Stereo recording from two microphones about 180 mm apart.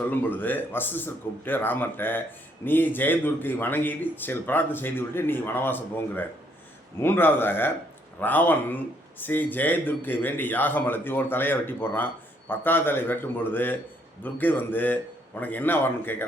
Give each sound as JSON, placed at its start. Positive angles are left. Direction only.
{"t": 0.0, "sound": "speech", "side_deg": 10}